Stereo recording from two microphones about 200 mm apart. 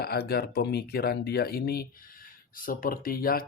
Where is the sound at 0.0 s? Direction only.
50° left (ahead or behind).